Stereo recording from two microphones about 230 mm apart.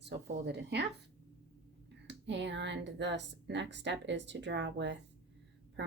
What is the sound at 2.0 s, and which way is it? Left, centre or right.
Speech, right.